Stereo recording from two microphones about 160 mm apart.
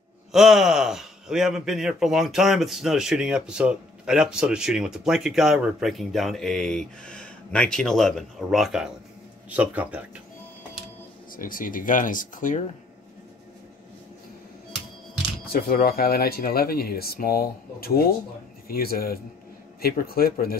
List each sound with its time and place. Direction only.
0.3 s speech: centre (ahead or behind)
11.3 s speech: 60° left (ahead or behind)
15.7 s speech: 75° left (ahead or behind)